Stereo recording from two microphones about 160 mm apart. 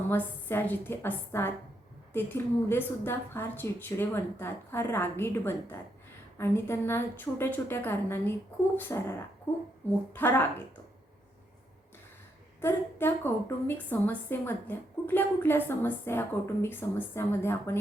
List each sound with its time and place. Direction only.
0.1 s a woman's voice: 15° left (ahead or behind)
12.6 s a woman's voice: 15° left (ahead or behind)